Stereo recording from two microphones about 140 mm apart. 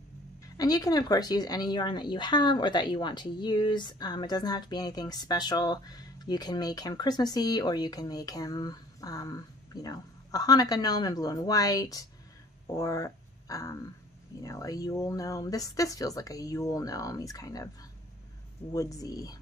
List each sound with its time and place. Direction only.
0.6 s speech: 25° left (ahead or behind)
18.7 s speech: 25° left (ahead or behind)